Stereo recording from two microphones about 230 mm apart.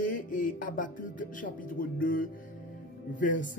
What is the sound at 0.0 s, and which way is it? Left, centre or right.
Music, left.